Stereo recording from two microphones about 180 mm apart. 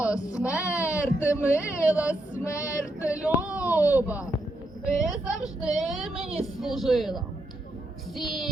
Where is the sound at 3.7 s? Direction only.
10° right (ahead or behind).